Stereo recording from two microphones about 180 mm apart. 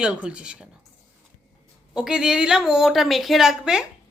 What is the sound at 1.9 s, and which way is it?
A woman's voice, 5° right (ahead or behind).